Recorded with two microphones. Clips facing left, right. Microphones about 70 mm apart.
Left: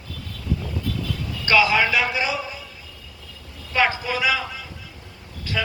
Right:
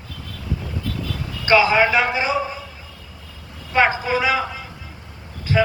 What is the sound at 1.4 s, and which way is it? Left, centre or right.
A man's voice, right.